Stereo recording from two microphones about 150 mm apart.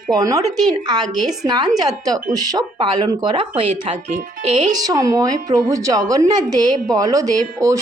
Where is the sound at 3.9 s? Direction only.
50° right (ahead or behind).